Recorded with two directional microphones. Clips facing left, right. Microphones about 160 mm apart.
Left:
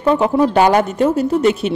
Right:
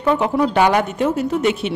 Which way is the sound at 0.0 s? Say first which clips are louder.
Left 3 dB; 30° left (ahead or behind).